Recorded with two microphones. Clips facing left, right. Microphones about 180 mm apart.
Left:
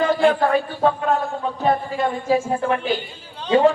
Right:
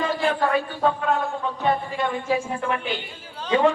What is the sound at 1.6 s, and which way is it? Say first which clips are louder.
Speech: left 3 dB; 40° left (ahead or behind).